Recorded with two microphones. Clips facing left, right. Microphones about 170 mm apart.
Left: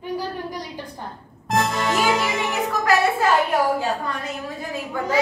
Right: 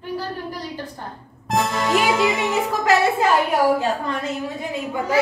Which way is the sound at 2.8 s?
20° right (ahead or behind).